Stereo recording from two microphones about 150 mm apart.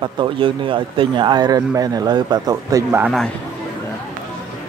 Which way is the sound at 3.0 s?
Centre (ahead or behind).